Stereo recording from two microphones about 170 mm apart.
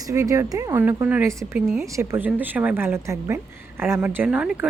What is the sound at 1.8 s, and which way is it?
A woman's voice, 15° right (ahead or behind).